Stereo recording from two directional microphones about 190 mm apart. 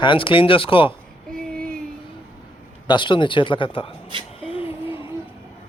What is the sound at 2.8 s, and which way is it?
Speech, 25° left (ahead or behind).